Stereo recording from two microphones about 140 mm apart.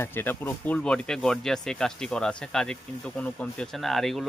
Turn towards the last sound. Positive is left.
turn(degrees=0)  # may be behind; listen again after turning